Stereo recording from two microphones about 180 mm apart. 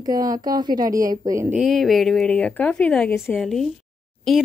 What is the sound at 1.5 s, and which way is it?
A woman's voice, centre (ahead or behind).